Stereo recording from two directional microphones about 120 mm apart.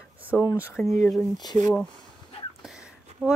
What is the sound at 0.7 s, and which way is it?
Speech, 15° left (ahead or behind).